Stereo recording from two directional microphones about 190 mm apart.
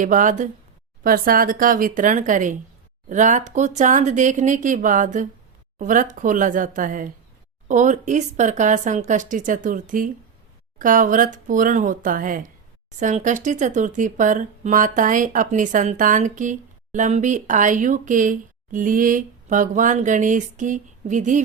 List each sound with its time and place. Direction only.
0.0 s speech: 45° right (ahead or behind)